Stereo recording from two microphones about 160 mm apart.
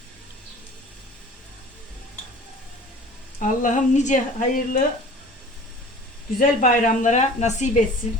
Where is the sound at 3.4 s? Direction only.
50° left (ahead or behind).